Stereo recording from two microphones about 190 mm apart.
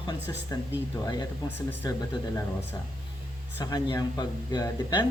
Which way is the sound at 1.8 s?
20° left (ahead or behind).